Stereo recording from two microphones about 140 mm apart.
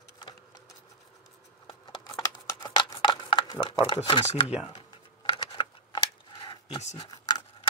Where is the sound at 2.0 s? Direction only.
25° left (ahead or behind).